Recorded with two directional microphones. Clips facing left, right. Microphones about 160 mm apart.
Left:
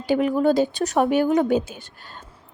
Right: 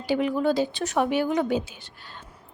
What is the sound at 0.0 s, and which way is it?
Speech, 50° left (ahead or behind).